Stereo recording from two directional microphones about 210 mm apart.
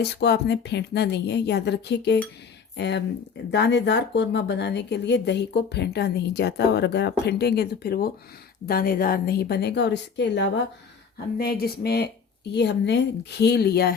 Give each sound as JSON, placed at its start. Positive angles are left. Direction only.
{"t": 0.0, "sound": "speech", "side_deg": 55}